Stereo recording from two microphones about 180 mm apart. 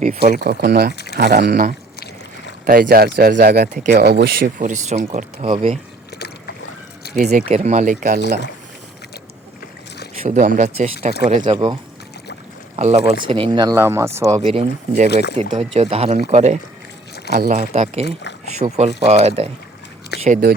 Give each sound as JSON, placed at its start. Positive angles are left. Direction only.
{"t": 0.0, "sound": "speech", "side_deg": -35}
{"t": 0.3, "sound": "speech", "side_deg": -60}
{"t": 0.9, "sound": "a sound", "side_deg": 65}
{"t": 1.2, "sound": "speech", "side_deg": -60}
{"t": 7.2, "sound": "speech", "side_deg": -40}
{"t": 10.2, "sound": "speech", "side_deg": -45}
{"t": 11.4, "sound": "speech", "side_deg": -30}
{"t": 12.7, "sound": "speech", "side_deg": -40}
{"t": 13.2, "sound": "speech", "side_deg": -30}
{"t": 14.4, "sound": "speech", "side_deg": -35}
{"t": 15.1, "sound": "speech", "side_deg": 65}
{"t": 15.4, "sound": "speech", "side_deg": -30}
{"t": 18.0, "sound": "speech", "side_deg": 75}
{"t": 18.4, "sound": "speech", "side_deg": -40}